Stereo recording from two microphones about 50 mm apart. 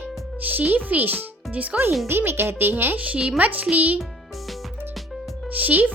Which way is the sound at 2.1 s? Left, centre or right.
Right.